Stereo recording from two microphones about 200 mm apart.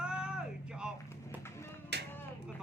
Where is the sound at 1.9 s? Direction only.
55° right (ahead or behind).